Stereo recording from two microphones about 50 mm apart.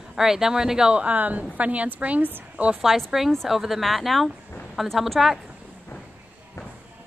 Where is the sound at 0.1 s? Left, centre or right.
Centre.